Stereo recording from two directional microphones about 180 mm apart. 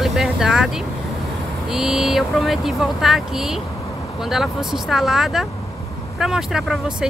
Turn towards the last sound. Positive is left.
turn(degrees=-5)  # may be behind; listen again after turning